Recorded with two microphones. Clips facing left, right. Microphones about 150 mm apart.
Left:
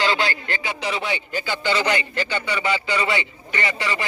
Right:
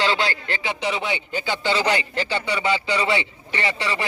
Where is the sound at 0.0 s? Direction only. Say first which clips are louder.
Even; 25° right (ahead or behind).